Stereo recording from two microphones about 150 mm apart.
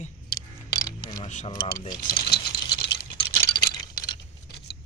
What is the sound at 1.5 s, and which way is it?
Speech, 25° left (ahead or behind).